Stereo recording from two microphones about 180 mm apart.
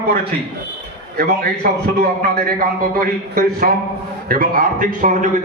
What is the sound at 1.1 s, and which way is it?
A man's voice, 60° right (ahead or behind).